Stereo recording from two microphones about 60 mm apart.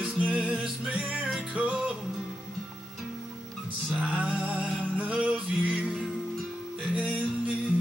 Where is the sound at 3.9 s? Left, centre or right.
Right.